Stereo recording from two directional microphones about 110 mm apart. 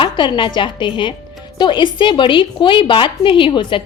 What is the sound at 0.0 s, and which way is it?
A woman's voice, 45° left (ahead or behind).